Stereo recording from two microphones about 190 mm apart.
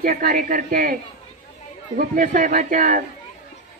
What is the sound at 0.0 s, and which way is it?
Speech, 50° right (ahead or behind).